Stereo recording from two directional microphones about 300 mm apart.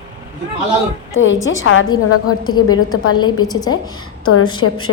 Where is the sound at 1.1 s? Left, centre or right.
Left.